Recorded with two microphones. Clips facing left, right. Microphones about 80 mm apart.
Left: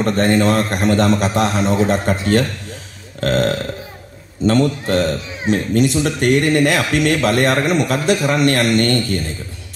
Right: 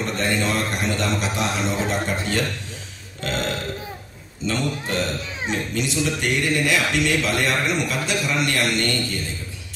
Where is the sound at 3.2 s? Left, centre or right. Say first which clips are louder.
Left 9 dB; left.